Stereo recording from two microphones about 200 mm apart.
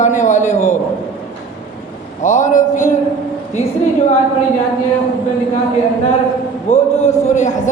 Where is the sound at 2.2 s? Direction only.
40° left (ahead or behind).